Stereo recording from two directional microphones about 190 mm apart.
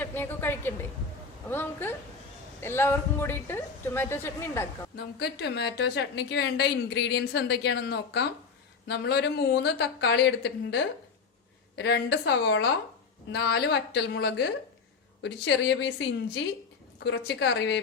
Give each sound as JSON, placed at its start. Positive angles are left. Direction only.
{"t": 0.0, "sound": "a woman's voice", "side_deg": 10}
{"t": 4.9, "sound": "a woman's voice", "side_deg": 60}